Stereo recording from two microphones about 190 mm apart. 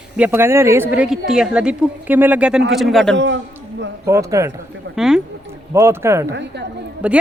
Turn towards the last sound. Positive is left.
turn(degrees=-5)  # may be behind; listen again after turning